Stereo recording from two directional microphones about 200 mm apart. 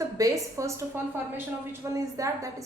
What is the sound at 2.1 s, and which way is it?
Speech, 15° right (ahead or behind).